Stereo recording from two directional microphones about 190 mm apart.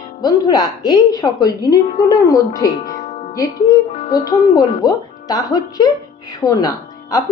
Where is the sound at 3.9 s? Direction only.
30° left (ahead or behind).